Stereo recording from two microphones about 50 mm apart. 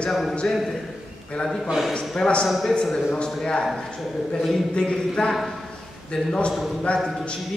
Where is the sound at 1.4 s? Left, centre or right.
Centre.